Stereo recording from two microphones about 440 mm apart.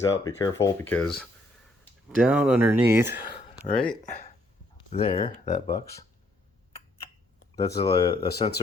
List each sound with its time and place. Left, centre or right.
0.3 s speech: centre
3.4 s speech: centre
7.5 s speech: centre